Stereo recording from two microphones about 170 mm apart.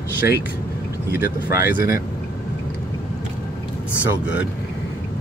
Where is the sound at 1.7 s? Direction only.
15° right (ahead or behind).